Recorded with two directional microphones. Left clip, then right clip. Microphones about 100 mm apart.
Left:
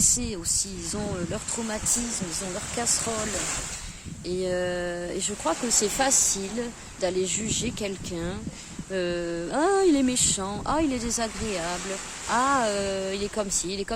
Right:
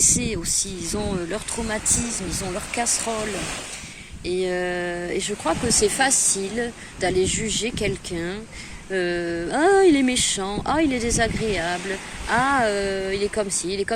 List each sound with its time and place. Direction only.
0.0 s speech: 50° left (ahead or behind)
4.3 s speech: 60° left (ahead or behind)
5.7 s a woman's voice: 70° left (ahead or behind)
10.7 s a woman's voice: 45° left (ahead or behind)